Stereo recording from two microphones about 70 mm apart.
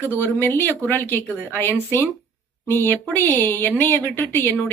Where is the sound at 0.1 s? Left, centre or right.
Left.